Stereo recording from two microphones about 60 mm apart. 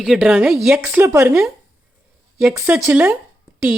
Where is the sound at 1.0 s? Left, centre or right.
Right.